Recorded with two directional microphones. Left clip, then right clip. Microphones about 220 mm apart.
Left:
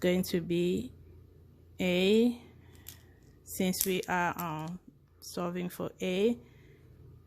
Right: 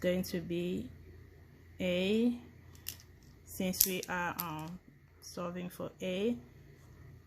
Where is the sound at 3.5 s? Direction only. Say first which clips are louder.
Left 4 dB; 40° left (ahead or behind).